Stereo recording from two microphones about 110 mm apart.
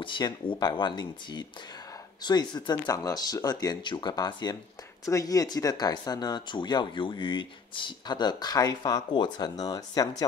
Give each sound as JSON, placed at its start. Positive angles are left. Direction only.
{"t": 0.0, "sound": "speech", "side_deg": 50}